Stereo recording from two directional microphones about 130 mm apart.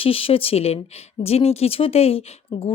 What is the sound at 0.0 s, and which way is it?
Speech, 45° left (ahead or behind).